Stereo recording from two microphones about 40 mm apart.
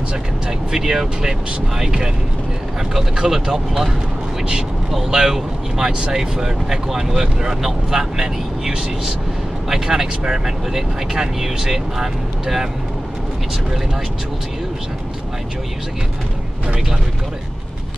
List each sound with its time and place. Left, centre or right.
0.5 s speech: centre
5.1 s speech: centre